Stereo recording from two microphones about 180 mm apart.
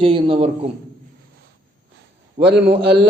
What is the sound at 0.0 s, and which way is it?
Speech, 30° right (ahead or behind).